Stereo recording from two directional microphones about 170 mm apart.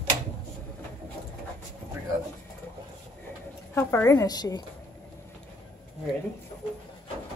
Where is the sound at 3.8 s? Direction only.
15° left (ahead or behind).